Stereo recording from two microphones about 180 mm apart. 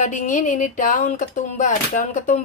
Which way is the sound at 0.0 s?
40° left (ahead or behind).